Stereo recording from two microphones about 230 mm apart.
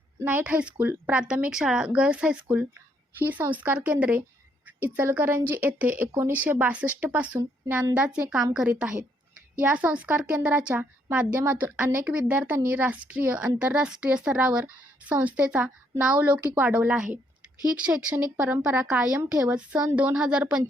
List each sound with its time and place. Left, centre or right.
0.2 s speech: centre